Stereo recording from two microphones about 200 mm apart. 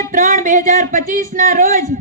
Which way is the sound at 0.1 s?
40° right (ahead or behind).